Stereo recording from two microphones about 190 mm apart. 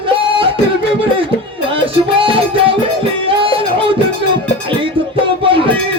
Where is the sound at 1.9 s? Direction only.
30° right (ahead or behind).